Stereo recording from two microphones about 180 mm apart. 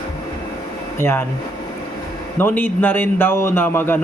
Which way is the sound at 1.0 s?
10° left (ahead or behind).